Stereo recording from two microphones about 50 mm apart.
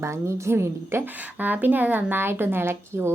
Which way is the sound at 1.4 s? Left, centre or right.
Right.